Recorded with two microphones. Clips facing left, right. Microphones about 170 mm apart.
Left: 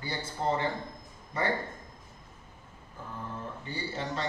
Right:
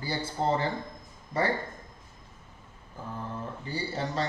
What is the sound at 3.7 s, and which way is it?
Speech, 35° right (ahead or behind).